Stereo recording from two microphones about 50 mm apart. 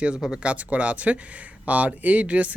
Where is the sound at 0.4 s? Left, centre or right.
Right.